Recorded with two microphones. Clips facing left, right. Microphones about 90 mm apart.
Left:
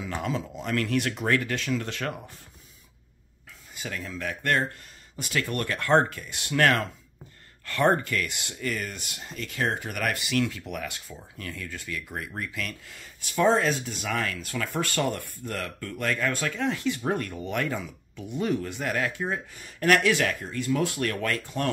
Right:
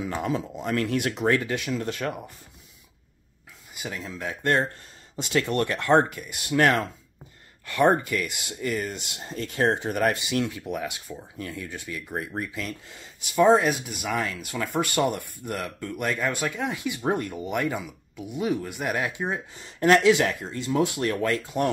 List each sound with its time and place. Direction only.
0.0 s speech: 20° right (ahead or behind)
3.7 s speech: 15° right (ahead or behind)